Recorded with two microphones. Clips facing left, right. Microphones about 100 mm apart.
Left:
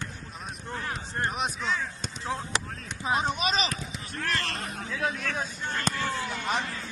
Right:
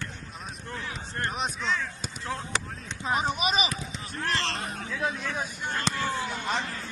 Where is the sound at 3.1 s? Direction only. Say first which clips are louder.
Even; centre (ahead or behind).